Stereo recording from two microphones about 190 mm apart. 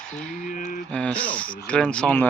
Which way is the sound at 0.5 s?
45° left (ahead or behind).